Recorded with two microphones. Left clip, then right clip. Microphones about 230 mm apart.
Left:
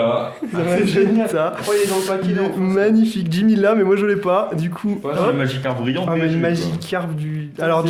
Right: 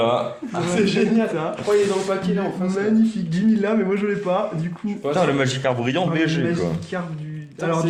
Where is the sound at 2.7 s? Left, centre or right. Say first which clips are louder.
Left 5 dB; left.